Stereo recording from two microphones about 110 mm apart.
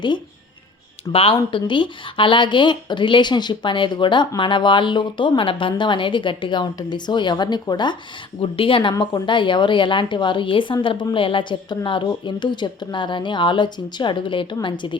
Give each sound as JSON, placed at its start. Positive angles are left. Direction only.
{"t": 1.1, "sound": "a woman's voice", "side_deg": 55}
{"t": 8.4, "sound": "a woman's voice", "side_deg": 55}